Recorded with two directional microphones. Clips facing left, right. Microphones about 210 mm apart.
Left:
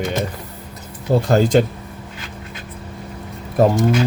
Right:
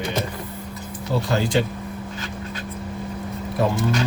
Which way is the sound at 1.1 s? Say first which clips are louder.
Left 7 dB; 50° left (ahead or behind).